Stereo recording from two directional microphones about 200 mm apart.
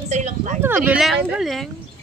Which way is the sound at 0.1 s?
35° right (ahead or behind).